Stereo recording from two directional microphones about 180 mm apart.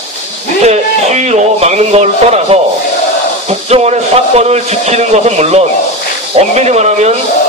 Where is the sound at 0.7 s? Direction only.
40° right (ahead or behind).